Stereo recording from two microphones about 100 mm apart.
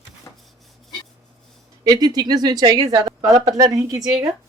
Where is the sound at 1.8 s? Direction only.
40° right (ahead or behind).